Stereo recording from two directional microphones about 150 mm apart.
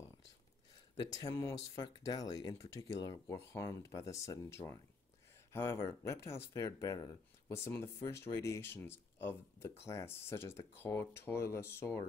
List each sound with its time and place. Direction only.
0.9 s speech: 20° left (ahead or behind)